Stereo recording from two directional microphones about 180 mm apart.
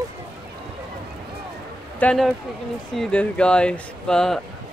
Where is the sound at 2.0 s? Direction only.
5° left (ahead or behind).